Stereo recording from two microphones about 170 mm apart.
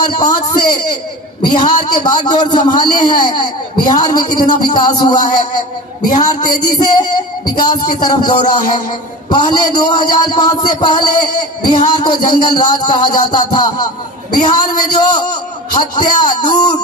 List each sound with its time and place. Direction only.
0.0 s a man's voice: 25° left (ahead or behind)
6.2 s a man's voice: 25° left (ahead or behind)